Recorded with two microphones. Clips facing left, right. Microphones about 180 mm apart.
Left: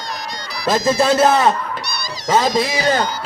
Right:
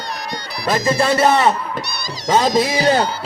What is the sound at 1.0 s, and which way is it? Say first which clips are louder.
A man's voice: left 1 dB; centre (ahead or behind).